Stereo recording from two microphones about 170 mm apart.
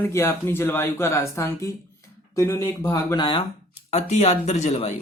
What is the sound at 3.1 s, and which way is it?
Speech, 30° left (ahead or behind).